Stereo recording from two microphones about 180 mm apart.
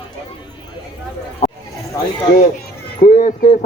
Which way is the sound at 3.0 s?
45° left (ahead or behind).